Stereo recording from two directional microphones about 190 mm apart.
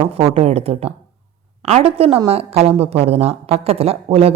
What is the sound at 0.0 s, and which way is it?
A woman's voice, 30° right (ahead or behind).